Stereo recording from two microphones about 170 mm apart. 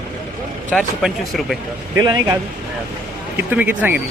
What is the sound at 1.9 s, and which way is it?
Speech, 20° right (ahead or behind).